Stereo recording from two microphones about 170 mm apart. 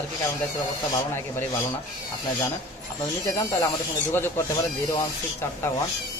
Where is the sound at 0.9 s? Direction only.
15° left (ahead or behind).